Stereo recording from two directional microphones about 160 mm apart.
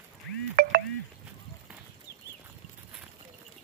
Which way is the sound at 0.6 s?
90° right.